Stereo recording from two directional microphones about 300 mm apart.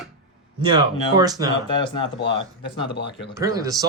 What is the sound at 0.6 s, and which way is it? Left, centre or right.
Speech, centre.